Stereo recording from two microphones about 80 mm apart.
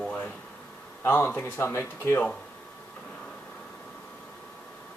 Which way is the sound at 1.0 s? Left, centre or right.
Left.